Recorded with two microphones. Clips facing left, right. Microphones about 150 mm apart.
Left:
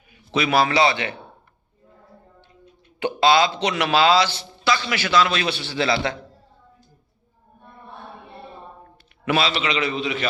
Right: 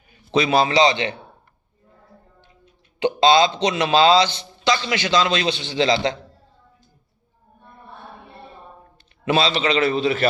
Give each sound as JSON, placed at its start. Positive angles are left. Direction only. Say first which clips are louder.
{"t": 0.1, "sound": "a man's voice", "louder": "right 3 dB", "side_deg": -30}
{"t": 3.0, "sound": "a man's voice", "louder": "right 2 dB", "side_deg": -20}
{"t": 9.2, "sound": "a man's voice", "louder": "right 3 dB", "side_deg": -25}